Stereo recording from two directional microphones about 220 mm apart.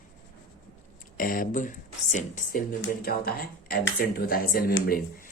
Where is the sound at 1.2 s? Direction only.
40° left (ahead or behind).